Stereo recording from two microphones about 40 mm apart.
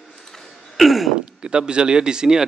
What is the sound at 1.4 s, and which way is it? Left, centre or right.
Speech, right.